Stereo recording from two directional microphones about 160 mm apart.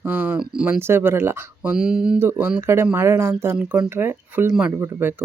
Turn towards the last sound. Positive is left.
turn(degrees=-10)  # may be behind; listen again after turning